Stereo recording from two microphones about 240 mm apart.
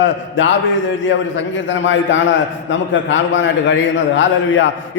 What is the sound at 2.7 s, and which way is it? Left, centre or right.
A man's voice, left.